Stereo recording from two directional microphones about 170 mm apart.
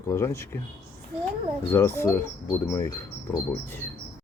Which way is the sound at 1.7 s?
15° left (ahead or behind).